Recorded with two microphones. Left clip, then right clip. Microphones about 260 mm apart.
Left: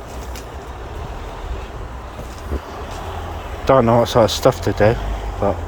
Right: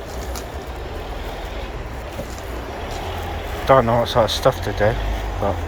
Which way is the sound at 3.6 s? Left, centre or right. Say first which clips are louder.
Left 2 dB; left.